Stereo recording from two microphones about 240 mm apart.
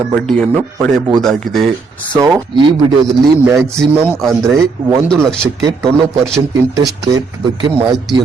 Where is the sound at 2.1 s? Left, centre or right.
Centre.